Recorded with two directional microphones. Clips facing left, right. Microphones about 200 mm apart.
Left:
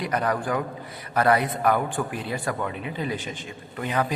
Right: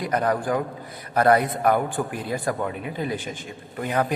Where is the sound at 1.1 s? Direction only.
45° right (ahead or behind).